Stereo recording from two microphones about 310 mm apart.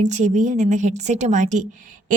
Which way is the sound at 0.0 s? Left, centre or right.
Right.